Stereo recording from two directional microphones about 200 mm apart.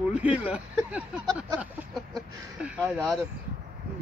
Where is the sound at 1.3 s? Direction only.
5° right (ahead or behind).